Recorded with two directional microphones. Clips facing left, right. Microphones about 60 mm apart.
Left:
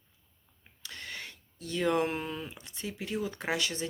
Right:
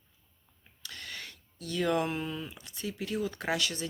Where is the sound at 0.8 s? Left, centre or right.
Left.